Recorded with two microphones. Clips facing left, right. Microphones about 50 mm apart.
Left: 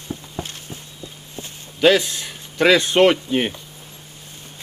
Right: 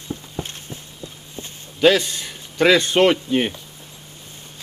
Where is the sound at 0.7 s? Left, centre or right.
Centre.